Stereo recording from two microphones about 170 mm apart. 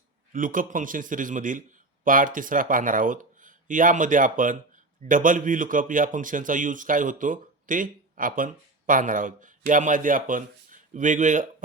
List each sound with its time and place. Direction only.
0.3 s speech: 55° right (ahead or behind)